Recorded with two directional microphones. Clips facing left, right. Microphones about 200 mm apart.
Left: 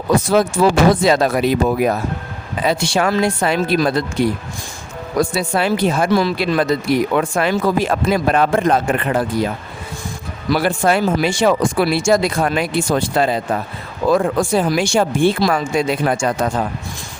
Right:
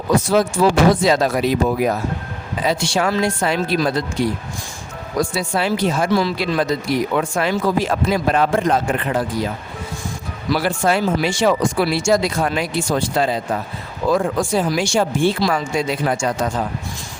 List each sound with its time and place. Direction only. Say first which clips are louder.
0.3 s speech: left 2 dB; 55° left (ahead or behind)
5.3 s speech: left 2 dB; 60° left (ahead or behind)
10.5 s speech: left 2 dB; 55° left (ahead or behind)